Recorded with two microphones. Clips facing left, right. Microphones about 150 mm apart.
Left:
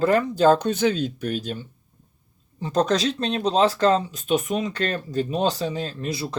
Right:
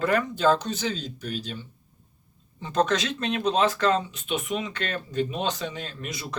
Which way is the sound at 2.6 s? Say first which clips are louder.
Left 3 dB; 35° left (ahead or behind).